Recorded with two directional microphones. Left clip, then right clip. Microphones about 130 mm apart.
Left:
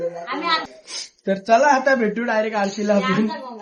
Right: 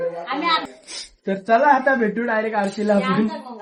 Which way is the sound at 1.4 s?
15° left (ahead or behind).